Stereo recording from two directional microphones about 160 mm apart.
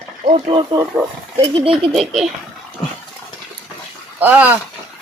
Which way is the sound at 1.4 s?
35° right (ahead or behind).